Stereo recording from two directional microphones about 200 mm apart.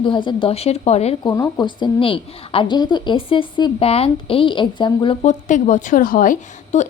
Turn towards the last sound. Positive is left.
turn(degrees=40)  # may be behind; listen again after turning